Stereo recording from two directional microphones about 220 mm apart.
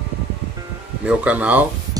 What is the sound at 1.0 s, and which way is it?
Speech, 5° right (ahead or behind).